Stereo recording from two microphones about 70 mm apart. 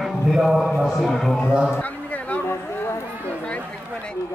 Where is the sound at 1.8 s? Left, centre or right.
Left.